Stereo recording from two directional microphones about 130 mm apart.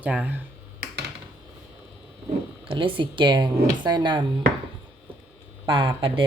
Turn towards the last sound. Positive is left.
turn(degrees=-40)  # may be behind; listen again after turning